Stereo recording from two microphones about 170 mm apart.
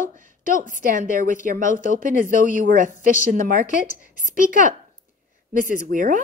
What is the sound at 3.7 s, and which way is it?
Speech, 50° left (ahead or behind).